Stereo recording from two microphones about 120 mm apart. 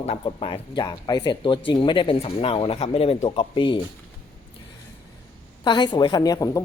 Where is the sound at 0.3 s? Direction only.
50° left (ahead or behind).